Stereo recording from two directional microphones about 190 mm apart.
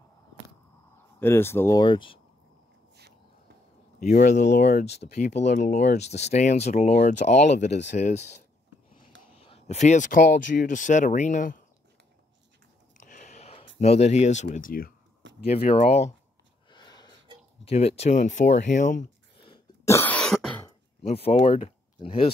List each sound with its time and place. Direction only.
1.2 s speech: 10° left (ahead or behind)
4.2 s speech: 40° left (ahead or behind)
9.3 s a sound: 35° left (ahead or behind)
10.5 s speech: 45° left (ahead or behind)
13.0 s a sound: 40° left (ahead or behind)
15.4 s speech: 30° left (ahead or behind)
16.6 s a sound: 20° left (ahead or behind)
17.6 s speech: 35° left (ahead or behind)
19.3 s throat clearing: 25° left (ahead or behind)
19.8 s cough: 15° left (ahead or behind)
21.0 s speech: 35° left (ahead or behind)